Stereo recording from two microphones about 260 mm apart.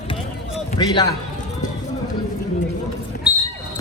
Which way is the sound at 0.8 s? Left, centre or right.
Centre.